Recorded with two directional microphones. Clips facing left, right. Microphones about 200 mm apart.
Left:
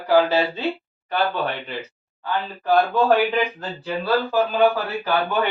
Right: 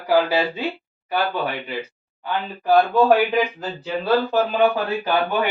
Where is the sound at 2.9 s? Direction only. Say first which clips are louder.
Right 2 dB; 10° right (ahead or behind).